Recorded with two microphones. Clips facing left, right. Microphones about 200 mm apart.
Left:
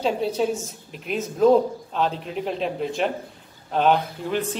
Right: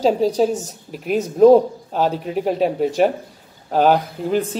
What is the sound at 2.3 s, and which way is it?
Speech, 50° right (ahead or behind).